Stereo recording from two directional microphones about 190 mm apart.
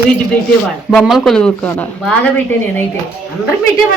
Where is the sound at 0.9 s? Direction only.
Centre (ahead or behind).